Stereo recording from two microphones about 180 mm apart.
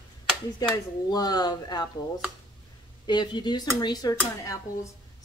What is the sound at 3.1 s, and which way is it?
A woman's voice, 25° left (ahead or behind).